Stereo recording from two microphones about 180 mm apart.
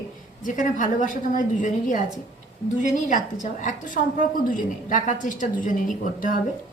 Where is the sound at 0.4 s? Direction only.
45° left (ahead or behind).